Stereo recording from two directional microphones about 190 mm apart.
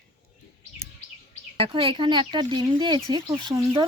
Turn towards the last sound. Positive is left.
turn(degrees=-20)  # may be behind; listen again after turning